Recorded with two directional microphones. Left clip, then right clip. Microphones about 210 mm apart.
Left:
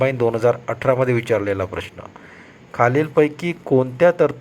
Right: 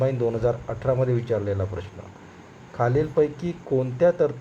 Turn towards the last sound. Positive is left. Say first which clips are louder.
# left 5 dB
turn(degrees=20)  # may be behind; listen again after turning